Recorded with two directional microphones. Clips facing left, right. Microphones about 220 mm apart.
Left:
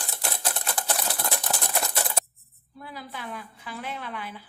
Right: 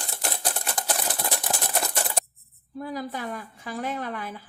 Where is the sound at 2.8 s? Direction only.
45° right (ahead or behind).